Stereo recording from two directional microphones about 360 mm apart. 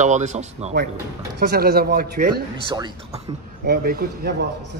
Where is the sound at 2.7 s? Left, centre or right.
Centre.